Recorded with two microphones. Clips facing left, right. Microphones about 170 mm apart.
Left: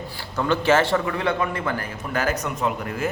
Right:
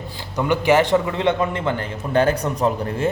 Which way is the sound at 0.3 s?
15° right (ahead or behind).